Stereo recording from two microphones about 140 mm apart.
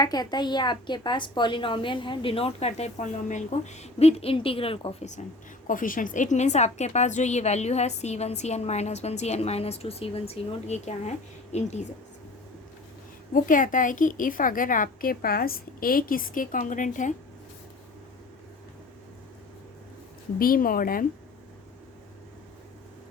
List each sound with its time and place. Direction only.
0.0 s a woman's voice: 30° left (ahead or behind); by 5.2 s 50° left (ahead or behind)
5.6 s a woman's voice: 75° left (ahead or behind); by 11.9 s 55° left (ahead or behind)
13.3 s a woman's voice: 70° left (ahead or behind)
20.4 s speech: 90° left